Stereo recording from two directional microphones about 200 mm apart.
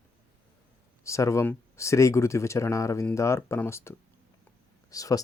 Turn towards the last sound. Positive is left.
turn(degrees=15)  # may be behind; listen again after turning